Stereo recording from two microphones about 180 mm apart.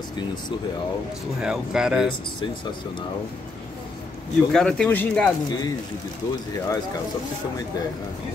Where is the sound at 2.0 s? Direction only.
25° left (ahead or behind).